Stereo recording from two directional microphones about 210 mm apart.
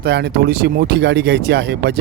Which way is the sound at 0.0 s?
55° right (ahead or behind).